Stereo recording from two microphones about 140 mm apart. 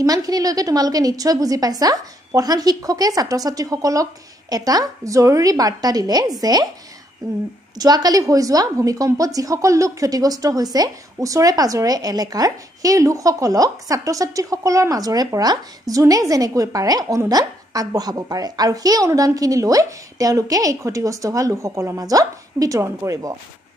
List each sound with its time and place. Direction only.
0.0 s a woman's voice: 25° right (ahead or behind)